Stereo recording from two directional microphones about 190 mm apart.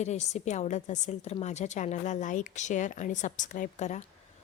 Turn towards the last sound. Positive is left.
turn(degrees=40)  # may be behind; listen again after turning